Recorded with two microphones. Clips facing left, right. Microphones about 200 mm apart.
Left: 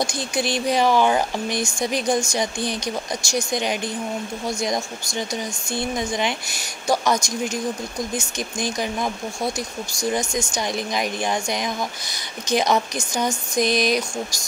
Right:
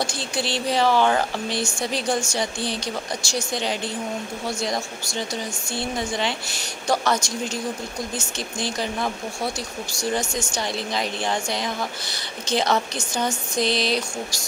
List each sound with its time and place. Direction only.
0.1 s a woman's voice: 15° left (ahead or behind)
8.2 s a woman's voice: 15° left (ahead or behind)